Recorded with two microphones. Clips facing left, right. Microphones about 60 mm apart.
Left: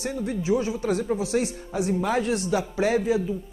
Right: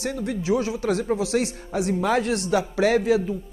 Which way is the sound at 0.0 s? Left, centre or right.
Right.